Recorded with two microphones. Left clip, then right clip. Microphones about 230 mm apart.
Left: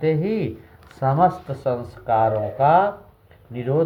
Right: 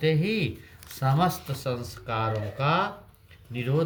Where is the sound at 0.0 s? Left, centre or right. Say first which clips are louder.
Left 4 dB; right.